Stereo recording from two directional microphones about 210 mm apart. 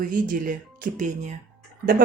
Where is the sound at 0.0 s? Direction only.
40° right (ahead or behind).